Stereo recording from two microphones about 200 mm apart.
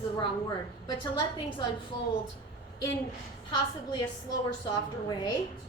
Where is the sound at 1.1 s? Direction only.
25° left (ahead or behind).